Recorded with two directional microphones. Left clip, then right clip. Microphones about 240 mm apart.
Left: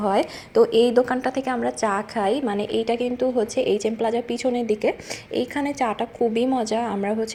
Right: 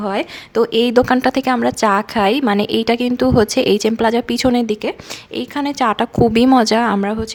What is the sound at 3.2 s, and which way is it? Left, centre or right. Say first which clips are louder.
Speech: right 8 dB; right.